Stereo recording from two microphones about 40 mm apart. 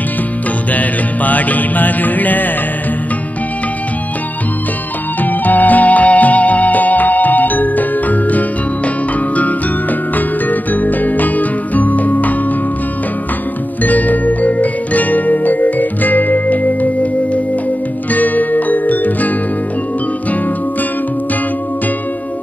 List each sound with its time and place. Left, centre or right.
0.7 s music: left
5.2 s music: left
13.8 s music: left
18.1 s music: left